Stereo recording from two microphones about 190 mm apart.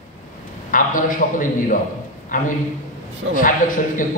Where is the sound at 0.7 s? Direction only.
45° left (ahead or behind).